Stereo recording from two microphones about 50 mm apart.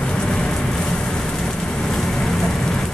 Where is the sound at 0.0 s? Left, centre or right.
Centre.